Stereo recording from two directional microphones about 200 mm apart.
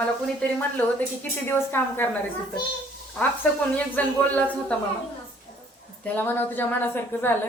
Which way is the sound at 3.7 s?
10° left (ahead or behind).